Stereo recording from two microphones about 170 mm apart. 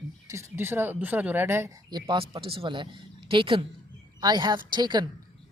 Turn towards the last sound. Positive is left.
turn(degrees=-25)  # may be behind; listen again after turning